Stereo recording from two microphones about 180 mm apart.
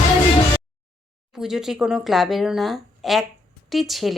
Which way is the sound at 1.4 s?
5° right (ahead or behind).